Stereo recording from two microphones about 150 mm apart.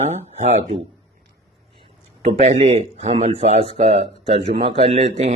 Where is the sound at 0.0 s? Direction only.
50° right (ahead or behind).